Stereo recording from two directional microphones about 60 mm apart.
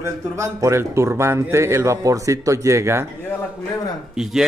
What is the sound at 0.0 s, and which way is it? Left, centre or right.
Speech, right.